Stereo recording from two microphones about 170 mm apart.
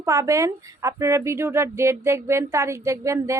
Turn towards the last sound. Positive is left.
turn(degrees=-15)  # may be behind; listen again after turning